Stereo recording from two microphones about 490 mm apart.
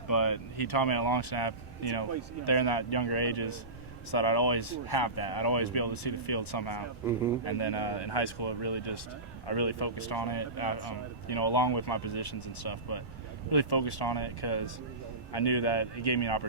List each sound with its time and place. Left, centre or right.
0.1 s speech: left